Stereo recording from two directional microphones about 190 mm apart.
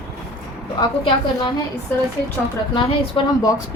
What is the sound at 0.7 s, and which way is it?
Speech, 25° left (ahead or behind).